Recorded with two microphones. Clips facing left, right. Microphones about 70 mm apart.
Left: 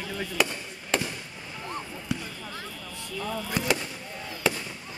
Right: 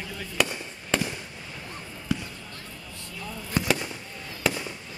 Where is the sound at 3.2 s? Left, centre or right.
Left.